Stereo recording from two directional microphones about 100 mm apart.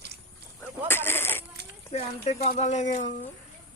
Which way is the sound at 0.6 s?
20° left (ahead or behind).